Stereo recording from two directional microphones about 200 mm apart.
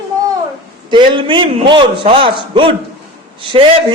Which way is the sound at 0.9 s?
25° right (ahead or behind).